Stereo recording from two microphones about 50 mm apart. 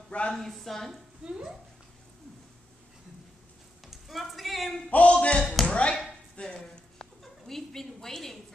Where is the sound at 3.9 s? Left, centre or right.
Centre.